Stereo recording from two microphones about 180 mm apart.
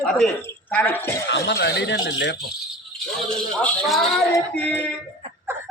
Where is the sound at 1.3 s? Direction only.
70° left (ahead or behind).